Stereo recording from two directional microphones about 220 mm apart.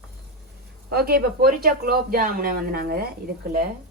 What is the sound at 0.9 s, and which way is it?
Speech, 45° right (ahead or behind).